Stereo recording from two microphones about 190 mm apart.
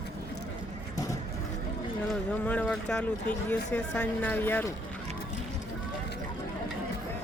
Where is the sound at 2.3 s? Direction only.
5° left (ahead or behind).